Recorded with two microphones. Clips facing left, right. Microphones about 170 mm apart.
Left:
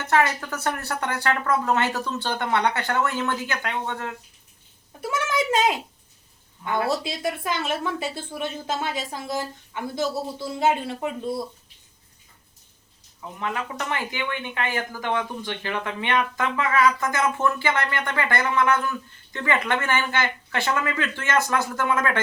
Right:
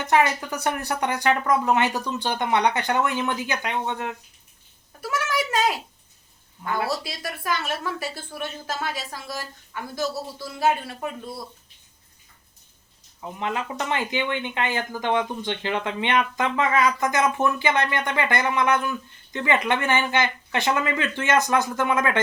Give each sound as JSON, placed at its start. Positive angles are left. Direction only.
{"t": 0.0, "sound": "speech", "side_deg": -15}
{"t": 4.9, "sound": "a sound", "side_deg": 25}
{"t": 6.7, "sound": "speech", "side_deg": 25}
{"t": 13.4, "sound": "speech", "side_deg": -20}